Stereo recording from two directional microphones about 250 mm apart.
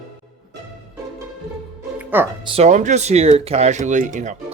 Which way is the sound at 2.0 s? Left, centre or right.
Centre.